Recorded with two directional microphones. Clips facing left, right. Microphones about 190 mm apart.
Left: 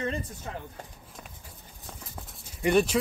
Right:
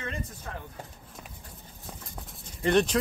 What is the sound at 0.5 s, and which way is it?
Speech, 15° left (ahead or behind).